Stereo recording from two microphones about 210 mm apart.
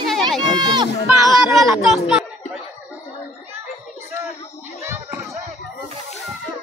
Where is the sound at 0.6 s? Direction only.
20° right (ahead or behind).